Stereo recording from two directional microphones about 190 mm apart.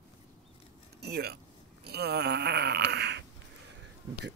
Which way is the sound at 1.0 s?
55° right (ahead or behind).